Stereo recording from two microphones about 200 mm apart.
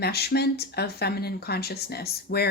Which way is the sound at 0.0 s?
50° left (ahead or behind).